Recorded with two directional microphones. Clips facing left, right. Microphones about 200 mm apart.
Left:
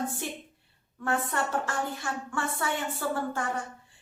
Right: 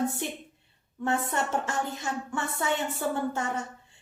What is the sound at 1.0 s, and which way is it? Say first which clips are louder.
Speech: right 1 dB; 20° right (ahead or behind).